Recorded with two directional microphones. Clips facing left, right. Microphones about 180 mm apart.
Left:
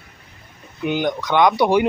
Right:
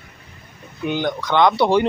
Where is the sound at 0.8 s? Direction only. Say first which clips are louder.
Left 1 dB; 15° left (ahead or behind).